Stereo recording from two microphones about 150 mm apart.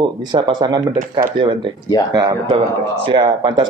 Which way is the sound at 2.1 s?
30° right (ahead or behind).